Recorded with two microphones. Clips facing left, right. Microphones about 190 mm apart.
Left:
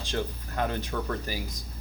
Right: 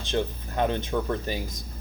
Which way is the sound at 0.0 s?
20° right (ahead or behind).